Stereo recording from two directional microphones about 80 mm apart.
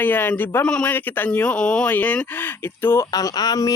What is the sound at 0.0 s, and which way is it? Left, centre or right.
Speech, left.